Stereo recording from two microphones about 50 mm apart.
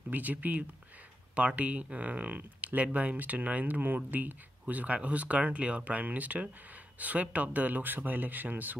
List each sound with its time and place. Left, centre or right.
0.1 s speech: right